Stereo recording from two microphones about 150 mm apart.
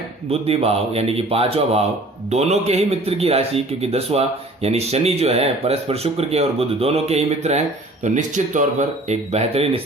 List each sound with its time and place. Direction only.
0.3 s speech: 40° right (ahead or behind)
9.0 s speech: 45° right (ahead or behind)